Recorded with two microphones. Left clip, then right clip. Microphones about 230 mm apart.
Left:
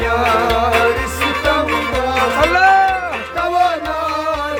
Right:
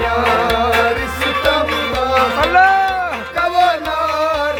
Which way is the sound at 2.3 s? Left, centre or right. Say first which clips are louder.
Even; centre.